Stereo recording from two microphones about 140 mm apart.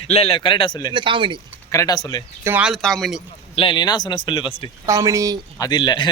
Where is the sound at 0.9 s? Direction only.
35° right (ahead or behind).